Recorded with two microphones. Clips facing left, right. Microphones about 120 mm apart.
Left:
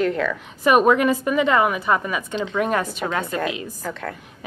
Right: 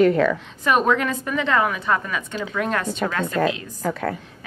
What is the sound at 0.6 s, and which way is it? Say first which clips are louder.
A woman's voice: left 4 dB; 10° left (ahead or behind).